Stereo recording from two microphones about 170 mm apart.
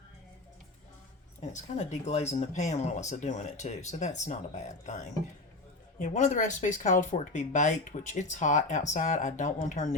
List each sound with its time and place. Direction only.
1.4 s speech: 40° left (ahead or behind)